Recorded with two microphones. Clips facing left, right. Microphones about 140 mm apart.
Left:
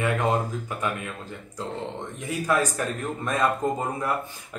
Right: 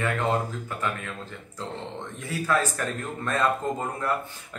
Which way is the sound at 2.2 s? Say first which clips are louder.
Left 1 dB; 15° left (ahead or behind).